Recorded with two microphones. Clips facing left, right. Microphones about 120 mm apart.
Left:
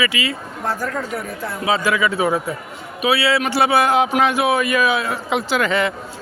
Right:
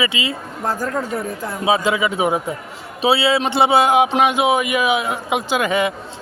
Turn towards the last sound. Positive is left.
turn(degrees=-15)  # may be behind; listen again after turning